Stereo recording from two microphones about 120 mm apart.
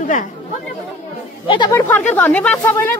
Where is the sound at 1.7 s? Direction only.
20° left (ahead or behind).